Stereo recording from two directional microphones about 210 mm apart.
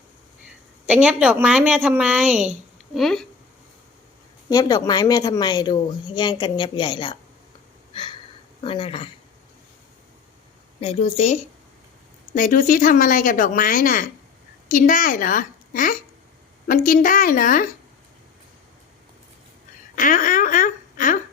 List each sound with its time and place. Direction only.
0.9 s a woman's voice: 5° right (ahead or behind)
4.4 s speech: 20° left (ahead or behind)
8.6 s speech: 25° left (ahead or behind)
10.8 s speech: 30° left (ahead or behind)
20.0 s speech: 40° left (ahead or behind)